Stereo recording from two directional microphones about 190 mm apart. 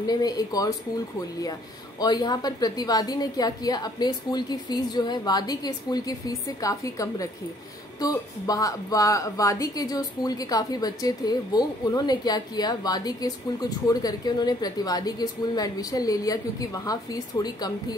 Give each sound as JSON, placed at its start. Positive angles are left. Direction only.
{"t": 0.0, "sound": "speech", "side_deg": 20}
{"t": 2.0, "sound": "speech", "side_deg": 20}